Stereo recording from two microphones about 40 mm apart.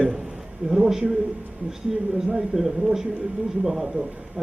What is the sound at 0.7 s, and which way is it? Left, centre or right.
Speech, centre.